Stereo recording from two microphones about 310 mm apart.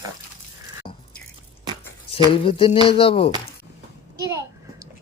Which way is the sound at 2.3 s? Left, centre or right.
Centre.